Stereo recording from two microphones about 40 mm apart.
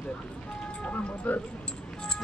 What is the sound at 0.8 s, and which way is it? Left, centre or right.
Speech, left.